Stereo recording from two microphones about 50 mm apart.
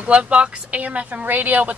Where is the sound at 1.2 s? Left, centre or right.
Right.